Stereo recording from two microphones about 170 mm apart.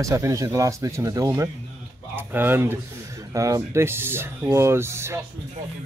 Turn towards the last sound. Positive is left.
turn(degrees=-15)  # may be behind; listen again after turning